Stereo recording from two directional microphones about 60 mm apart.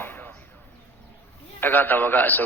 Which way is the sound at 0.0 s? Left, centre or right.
Left.